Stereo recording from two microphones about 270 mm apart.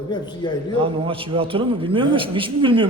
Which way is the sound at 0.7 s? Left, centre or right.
Centre.